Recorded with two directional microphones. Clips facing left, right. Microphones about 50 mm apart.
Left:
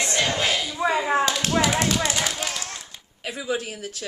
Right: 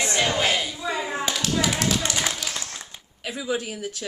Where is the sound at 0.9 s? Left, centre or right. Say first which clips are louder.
Left 7 dB; left.